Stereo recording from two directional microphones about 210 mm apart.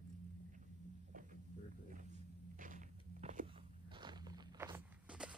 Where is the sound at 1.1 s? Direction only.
40° right (ahead or behind).